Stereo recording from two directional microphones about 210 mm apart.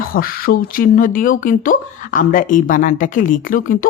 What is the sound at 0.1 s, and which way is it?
Speech, 45° left (ahead or behind).